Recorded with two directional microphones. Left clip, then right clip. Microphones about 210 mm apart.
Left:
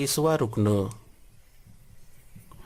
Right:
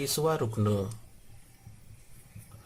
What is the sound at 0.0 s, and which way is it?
Speech, 30° left (ahead or behind).